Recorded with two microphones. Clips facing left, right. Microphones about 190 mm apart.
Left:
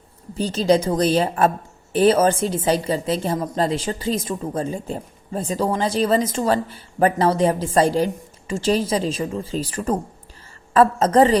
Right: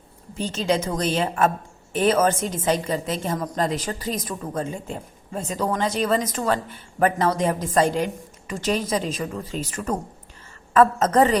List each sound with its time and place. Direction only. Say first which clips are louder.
0.3 s a woman's voice: left 5 dB; 35° left (ahead or behind)